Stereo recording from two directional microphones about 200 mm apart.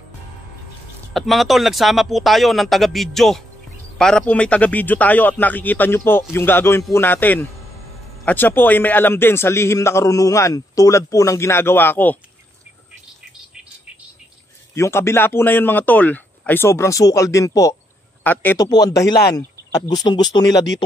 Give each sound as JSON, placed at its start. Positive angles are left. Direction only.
{"t": 1.1, "sound": "a man's voice", "side_deg": 0}
{"t": 14.8, "sound": "a man's voice", "side_deg": 15}